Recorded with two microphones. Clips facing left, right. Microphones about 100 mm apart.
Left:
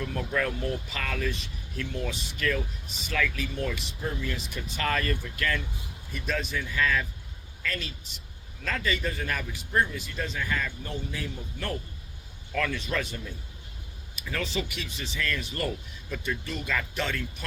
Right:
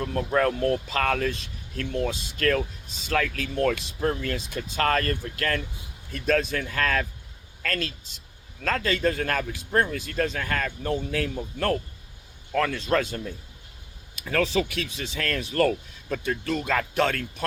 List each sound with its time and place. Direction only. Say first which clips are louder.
0.0 s a man's voice: right 6 dB; 45° right (ahead or behind); by 11.8 s 65° right (ahead or behind)
12.5 s speech: right 6 dB; 45° right (ahead or behind)
14.3 s speech: right 8 dB; 70° right (ahead or behind)
15.2 s a man's voice: right 8 dB; 60° right (ahead or behind)
16.6 s a man's voice: right 6 dB; 55° right (ahead or behind)